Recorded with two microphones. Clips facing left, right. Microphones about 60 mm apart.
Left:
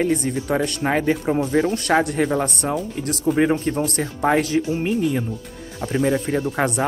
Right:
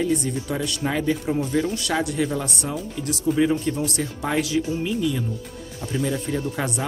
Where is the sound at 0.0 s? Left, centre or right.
Left.